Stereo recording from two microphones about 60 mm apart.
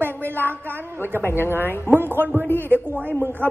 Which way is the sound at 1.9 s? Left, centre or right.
Right.